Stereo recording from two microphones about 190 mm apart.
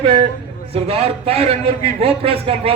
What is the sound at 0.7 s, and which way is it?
A man's voice, 30° right (ahead or behind).